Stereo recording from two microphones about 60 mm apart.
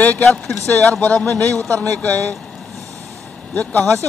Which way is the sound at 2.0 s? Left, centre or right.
Left.